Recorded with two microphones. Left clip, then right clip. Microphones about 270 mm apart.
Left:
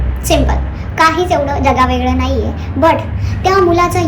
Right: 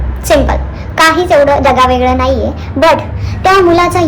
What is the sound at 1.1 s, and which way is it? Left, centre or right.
A child's voice, centre.